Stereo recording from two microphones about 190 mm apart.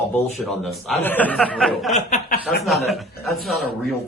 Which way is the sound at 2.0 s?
40° left (ahead or behind).